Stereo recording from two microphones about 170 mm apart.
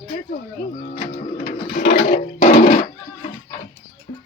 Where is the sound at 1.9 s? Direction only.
65° left (ahead or behind).